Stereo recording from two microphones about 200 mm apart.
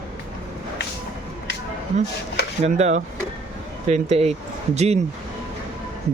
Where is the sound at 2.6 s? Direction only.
35° right (ahead or behind).